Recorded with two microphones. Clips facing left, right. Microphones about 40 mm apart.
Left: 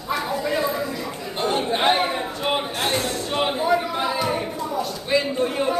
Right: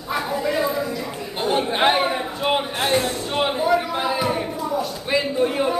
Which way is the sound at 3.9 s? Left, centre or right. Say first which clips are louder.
Right 1 dB; centre.